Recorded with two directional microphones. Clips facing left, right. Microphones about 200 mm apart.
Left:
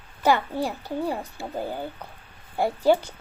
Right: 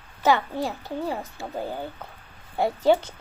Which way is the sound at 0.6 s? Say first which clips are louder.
Left 1 dB; centre (ahead or behind).